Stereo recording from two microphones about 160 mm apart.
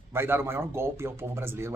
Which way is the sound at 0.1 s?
15° right (ahead or behind).